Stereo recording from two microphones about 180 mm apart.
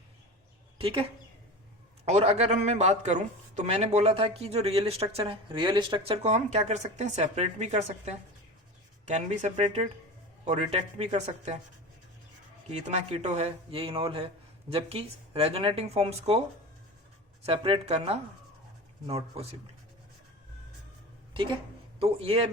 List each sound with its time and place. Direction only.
0.8 s speech: 30° right (ahead or behind)
2.0 s speech: 35° right (ahead or behind)
12.7 s speech: 40° right (ahead or behind)
17.4 s speech: 30° right (ahead or behind)
21.9 s speech: 35° right (ahead or behind)